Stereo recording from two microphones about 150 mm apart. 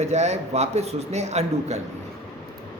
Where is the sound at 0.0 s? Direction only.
45° right (ahead or behind).